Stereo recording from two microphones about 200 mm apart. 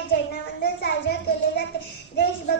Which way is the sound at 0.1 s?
55° left (ahead or behind).